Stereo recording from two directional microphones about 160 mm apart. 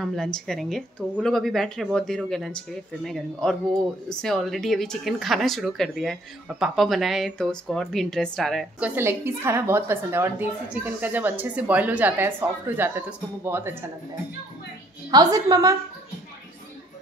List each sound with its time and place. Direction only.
0.0 s a woman's voice: centre (ahead or behind)
8.7 s a woman's voice: 10° right (ahead or behind)
15.0 s a woman's voice: 25° right (ahead or behind)